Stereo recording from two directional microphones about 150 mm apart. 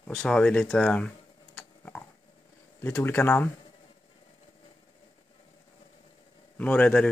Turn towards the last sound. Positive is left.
turn(degrees=10)  # may be behind; listen again after turning